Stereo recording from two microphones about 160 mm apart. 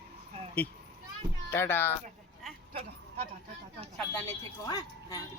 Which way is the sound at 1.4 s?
15° left (ahead or behind).